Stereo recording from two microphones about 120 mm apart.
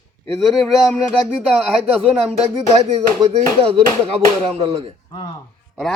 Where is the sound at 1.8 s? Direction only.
55° right (ahead or behind).